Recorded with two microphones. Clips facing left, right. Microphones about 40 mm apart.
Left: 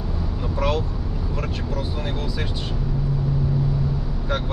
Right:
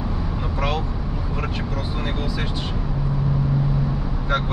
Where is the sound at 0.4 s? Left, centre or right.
Right.